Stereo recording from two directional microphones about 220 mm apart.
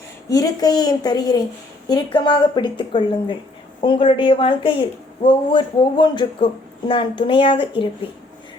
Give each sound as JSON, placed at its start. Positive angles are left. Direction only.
{"t": 0.3, "sound": "speech", "side_deg": 15}